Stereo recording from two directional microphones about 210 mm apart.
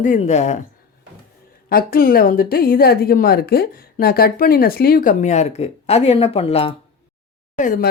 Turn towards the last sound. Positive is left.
turn(degrees=40)  # may be behind; listen again after turning